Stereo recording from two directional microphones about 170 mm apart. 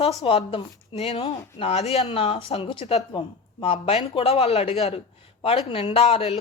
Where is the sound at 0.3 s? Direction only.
35° left (ahead or behind).